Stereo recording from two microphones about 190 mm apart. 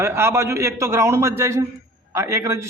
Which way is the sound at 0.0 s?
15° right (ahead or behind).